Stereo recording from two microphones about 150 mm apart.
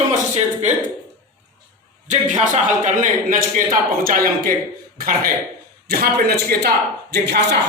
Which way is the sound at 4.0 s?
70° right (ahead or behind).